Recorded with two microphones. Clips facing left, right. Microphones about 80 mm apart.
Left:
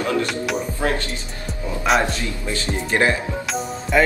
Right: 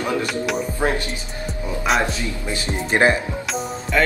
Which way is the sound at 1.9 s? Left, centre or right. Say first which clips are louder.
Left 2 dB; centre.